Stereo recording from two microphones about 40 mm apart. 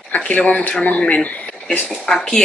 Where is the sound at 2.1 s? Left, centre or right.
Left.